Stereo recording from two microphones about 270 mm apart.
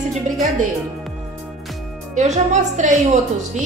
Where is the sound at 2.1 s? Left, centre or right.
Right.